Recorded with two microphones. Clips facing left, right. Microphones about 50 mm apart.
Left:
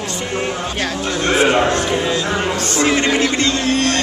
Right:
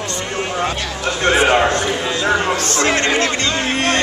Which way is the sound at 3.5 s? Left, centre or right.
Right.